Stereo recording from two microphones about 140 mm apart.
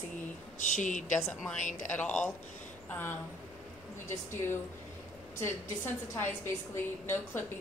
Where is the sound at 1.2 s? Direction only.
5° left (ahead or behind).